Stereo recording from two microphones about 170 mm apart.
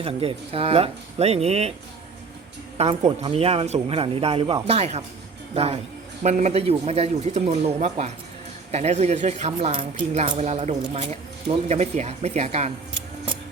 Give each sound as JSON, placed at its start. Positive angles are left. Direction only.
{"t": 0.0, "sound": "speech", "side_deg": -35}
{"t": 2.7, "sound": "speech", "side_deg": -35}